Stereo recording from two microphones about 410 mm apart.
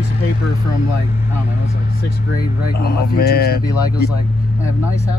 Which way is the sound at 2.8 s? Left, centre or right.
Left.